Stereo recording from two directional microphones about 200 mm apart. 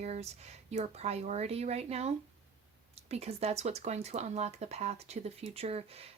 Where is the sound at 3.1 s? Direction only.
30° right (ahead or behind).